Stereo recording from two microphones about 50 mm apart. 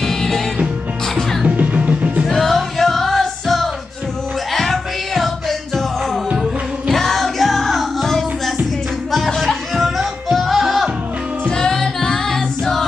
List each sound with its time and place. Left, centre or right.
0.0 s music: centre
1.4 s music: right
2.2 s music: centre
6.3 s music: centre
7.0 s music: centre
11.5 s music: centre